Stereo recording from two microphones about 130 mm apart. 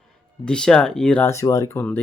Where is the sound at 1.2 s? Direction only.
20° left (ahead or behind).